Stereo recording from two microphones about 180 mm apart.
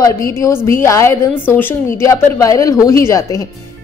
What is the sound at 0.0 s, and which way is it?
A woman's voice, 15° left (ahead or behind).